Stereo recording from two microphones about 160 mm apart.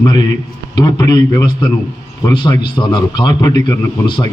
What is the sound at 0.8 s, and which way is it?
A man's voice, 25° left (ahead or behind).